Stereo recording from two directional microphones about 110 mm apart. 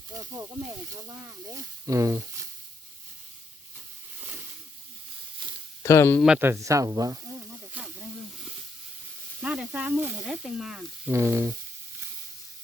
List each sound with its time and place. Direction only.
0.1 s speech: 30° right (ahead or behind)
5.8 s speech: 25° left (ahead or behind)
6.4 s speech: 25° right (ahead or behind)
7.5 s snake: 10° right (ahead or behind)
9.4 s snake: 10° right (ahead or behind)
10.2 s speech: 5° right (ahead or behind)
11.1 s speech: 25° right (ahead or behind)